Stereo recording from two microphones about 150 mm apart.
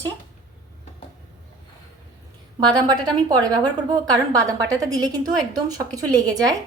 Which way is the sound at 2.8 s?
25° right (ahead or behind).